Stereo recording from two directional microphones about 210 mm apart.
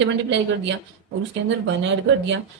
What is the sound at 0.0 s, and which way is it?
A woman's voice, 60° right (ahead or behind).